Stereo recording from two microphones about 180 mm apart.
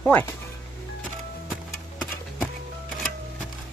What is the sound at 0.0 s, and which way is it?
Speech, 10° left (ahead or behind).